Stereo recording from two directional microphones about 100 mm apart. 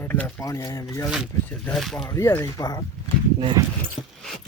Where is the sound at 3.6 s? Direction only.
35° right (ahead or behind).